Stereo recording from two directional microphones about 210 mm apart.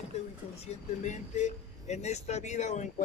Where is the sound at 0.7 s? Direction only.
35° left (ahead or behind).